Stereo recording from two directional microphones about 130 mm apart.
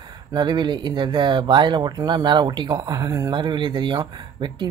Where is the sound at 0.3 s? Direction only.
35° right (ahead or behind).